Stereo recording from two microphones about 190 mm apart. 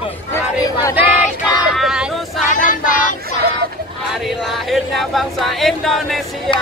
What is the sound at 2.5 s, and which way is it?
Child singing, 45° left (ahead or behind).